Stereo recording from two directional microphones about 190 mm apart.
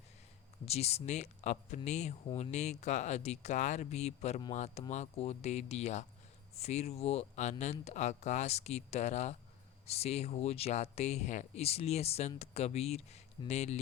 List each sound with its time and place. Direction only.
0.6 s speech: 35° left (ahead or behind)